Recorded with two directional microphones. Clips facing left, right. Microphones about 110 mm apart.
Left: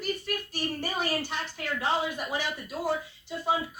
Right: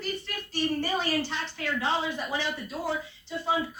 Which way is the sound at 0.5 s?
15° left (ahead or behind).